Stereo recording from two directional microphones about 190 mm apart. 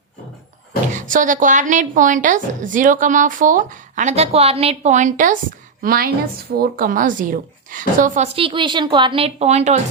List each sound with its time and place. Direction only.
0.9 s a woman's voice: 45° right (ahead or behind)
8.4 s a woman's voice: 25° right (ahead or behind)